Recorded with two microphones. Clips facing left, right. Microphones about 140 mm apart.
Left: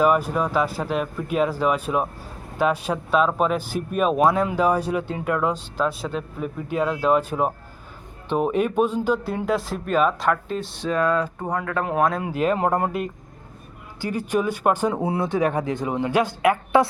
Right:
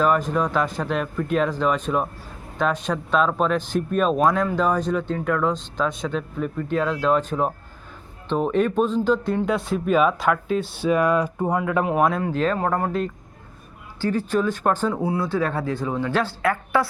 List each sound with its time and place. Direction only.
0.0 s speech: 10° left (ahead or behind)
12.2 s speech: 10° left (ahead or behind)